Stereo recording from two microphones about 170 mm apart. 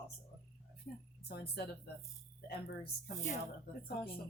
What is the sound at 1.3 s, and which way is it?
Speech, 70° left (ahead or behind).